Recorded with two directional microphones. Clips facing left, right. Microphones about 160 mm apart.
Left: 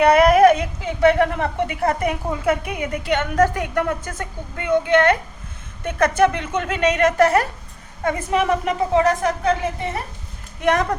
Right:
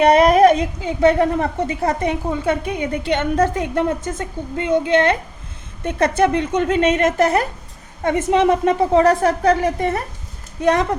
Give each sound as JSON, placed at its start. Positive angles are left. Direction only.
{"t": 0.0, "sound": "a woman's voice", "side_deg": -25}
{"t": 9.0, "sound": "a woman's voice", "side_deg": -35}
{"t": 10.6, "sound": "a woman's voice", "side_deg": -30}